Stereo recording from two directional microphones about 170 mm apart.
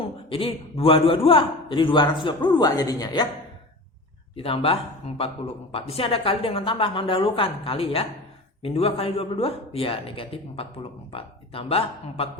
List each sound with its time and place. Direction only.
0.0 s a man's voice: 30° left (ahead or behind)
4.4 s speech: 35° left (ahead or behind)